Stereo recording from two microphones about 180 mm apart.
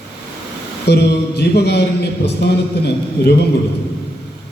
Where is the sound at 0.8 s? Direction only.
65° left (ahead or behind).